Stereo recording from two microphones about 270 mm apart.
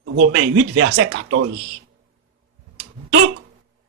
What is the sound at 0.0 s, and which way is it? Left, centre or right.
Speech, right.